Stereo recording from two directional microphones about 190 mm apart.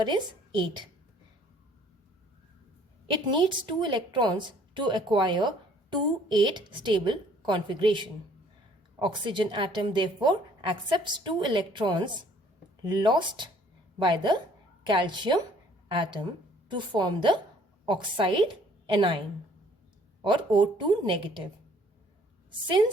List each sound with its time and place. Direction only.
0.0 s speech: 25° right (ahead or behind)
3.2 s speech: 25° right (ahead or behind)
16.6 s a woman's voice: 25° right (ahead or behind)
20.2 s speech: 25° right (ahead or behind)